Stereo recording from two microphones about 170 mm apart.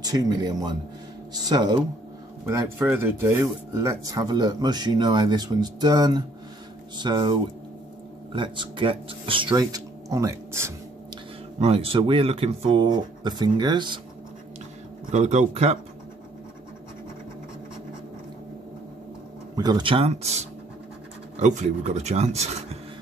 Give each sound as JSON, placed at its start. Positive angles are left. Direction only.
{"t": 0.0, "sound": "a man's voice", "side_deg": -25}
{"t": 11.6, "sound": "speech", "side_deg": -35}
{"t": 15.0, "sound": "speech", "side_deg": -40}
{"t": 19.5, "sound": "speech", "side_deg": -25}
{"t": 21.4, "sound": "speech", "side_deg": -45}